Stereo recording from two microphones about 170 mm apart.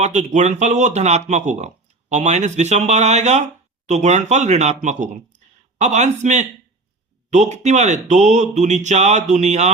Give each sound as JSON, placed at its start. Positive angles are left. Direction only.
{"t": 0.0, "sound": "speech", "side_deg": -45}